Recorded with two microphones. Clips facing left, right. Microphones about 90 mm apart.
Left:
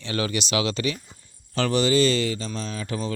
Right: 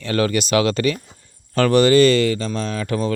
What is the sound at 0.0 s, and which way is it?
Speech, 50° right (ahead or behind).